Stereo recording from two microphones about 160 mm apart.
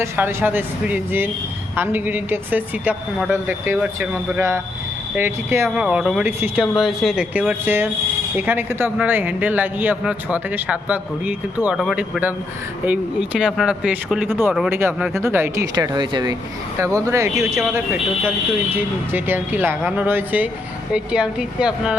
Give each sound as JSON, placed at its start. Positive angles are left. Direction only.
{"t": 0.0, "sound": "a man's voice", "side_deg": -15}
{"t": 5.7, "sound": "a man's voice", "side_deg": -5}
{"t": 17.4, "sound": "speech", "side_deg": 0}
{"t": 19.1, "sound": "a man's voice", "side_deg": -10}